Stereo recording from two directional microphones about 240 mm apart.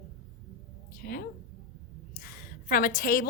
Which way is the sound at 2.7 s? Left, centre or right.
Left.